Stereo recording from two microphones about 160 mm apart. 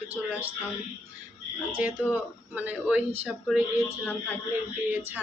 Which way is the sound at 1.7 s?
10° right (ahead or behind).